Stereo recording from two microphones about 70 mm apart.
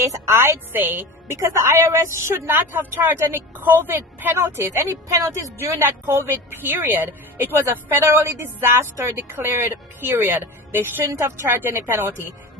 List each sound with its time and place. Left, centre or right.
0.0 s a woman's voice: right
1.4 s a woman's voice: right
11.1 s a woman's voice: right